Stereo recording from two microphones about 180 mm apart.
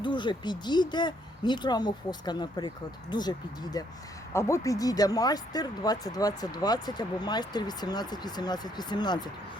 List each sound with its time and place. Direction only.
0.0 s speech: 25° left (ahead or behind)